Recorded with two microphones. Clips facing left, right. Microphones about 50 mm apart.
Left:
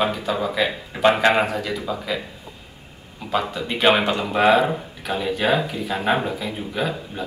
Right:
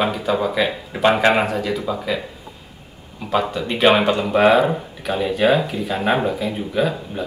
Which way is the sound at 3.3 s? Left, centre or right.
Centre.